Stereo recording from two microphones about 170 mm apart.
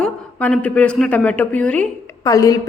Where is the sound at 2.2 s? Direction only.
20° left (ahead or behind).